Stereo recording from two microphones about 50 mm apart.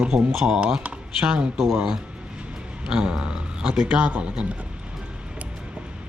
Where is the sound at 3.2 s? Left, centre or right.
Centre.